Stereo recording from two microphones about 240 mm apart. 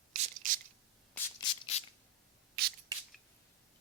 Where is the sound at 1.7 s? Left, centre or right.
Left.